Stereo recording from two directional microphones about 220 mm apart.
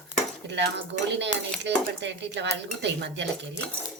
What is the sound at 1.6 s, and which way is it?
Speech, 55° right (ahead or behind).